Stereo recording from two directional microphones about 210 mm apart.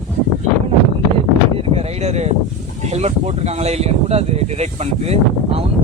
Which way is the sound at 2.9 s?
30° right (ahead or behind).